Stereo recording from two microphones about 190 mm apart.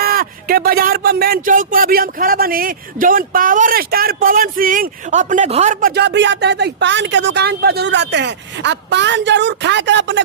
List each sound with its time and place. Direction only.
0.0 s speech: 50° right (ahead or behind)
5.8 s speech: 60° right (ahead or behind)